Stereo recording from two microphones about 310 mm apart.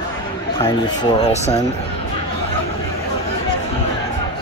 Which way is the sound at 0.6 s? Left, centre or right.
Centre.